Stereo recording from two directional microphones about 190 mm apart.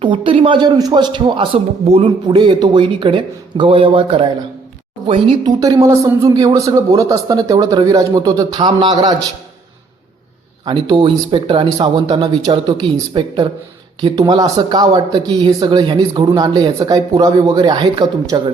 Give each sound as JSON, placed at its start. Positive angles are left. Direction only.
{"t": 0.0, "sound": "speech", "side_deg": -25}
{"t": 10.7, "sound": "speech", "side_deg": -25}